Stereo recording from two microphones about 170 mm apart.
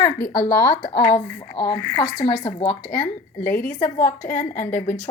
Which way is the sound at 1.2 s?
25° left (ahead or behind).